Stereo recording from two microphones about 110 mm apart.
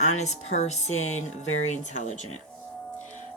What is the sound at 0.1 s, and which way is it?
Speech, 90° left.